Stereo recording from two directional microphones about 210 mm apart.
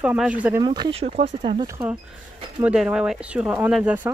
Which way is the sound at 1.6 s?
10° right (ahead or behind).